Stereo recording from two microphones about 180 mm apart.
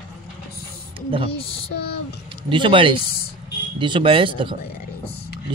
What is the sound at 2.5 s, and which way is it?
Speech, 30° right (ahead or behind).